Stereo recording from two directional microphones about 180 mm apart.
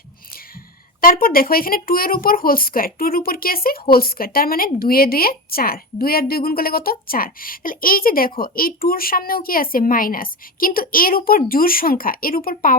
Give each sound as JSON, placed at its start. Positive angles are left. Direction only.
{"t": 1.0, "sound": "speech", "side_deg": 55}